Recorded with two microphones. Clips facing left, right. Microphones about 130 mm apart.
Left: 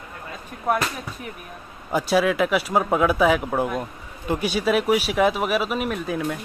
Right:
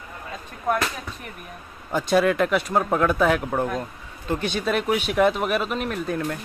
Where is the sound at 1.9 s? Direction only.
5° left (ahead or behind).